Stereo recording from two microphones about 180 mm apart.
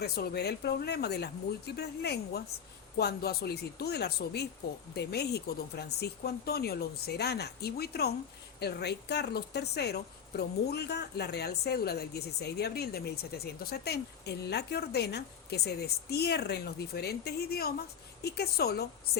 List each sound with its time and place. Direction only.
0.0 s a woman's voice: 65° left (ahead or behind)